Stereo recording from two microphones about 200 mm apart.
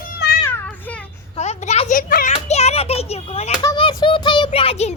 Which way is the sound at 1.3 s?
35° left (ahead or behind).